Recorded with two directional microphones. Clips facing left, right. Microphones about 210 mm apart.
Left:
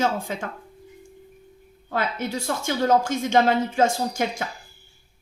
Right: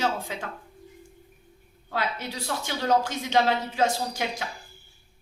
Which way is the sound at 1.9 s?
50° left (ahead or behind).